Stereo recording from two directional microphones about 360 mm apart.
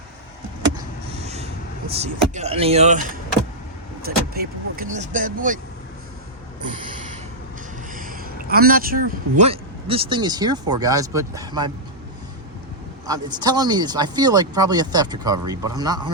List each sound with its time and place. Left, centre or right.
1.1 s vehicle: centre
1.9 s speech: centre
7.9 s a man's voice: right
13.1 s speech: centre